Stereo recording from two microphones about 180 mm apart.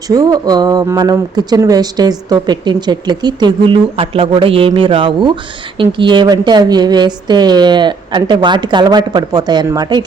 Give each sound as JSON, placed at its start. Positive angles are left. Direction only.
{"t": 0.1, "sound": "speech", "side_deg": -20}